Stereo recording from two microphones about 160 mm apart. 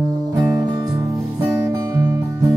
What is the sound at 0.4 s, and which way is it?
Music, 20° right (ahead or behind).